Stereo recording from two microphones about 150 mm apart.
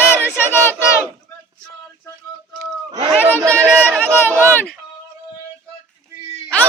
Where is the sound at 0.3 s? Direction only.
15° left (ahead or behind).